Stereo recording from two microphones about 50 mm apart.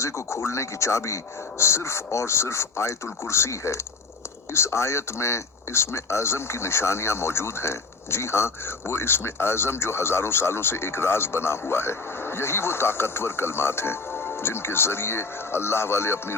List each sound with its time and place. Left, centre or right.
0.0 s speech: left